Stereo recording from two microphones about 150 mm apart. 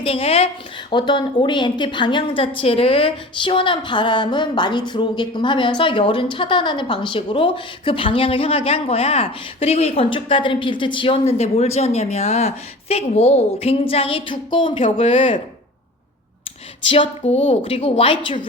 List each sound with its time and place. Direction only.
0.0 s a woman's voice: 40° left (ahead or behind)
16.9 s a woman's voice: 40° left (ahead or behind)